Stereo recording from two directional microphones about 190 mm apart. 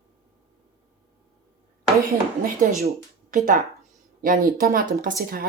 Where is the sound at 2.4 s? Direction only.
45° right (ahead or behind).